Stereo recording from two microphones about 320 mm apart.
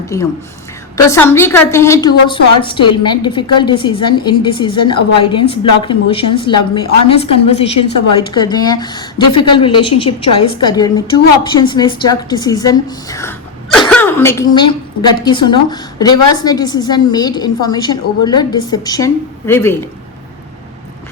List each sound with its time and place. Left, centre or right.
0.1 s a woman's voice: centre